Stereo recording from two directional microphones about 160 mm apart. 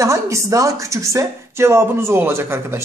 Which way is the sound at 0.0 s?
20° right (ahead or behind).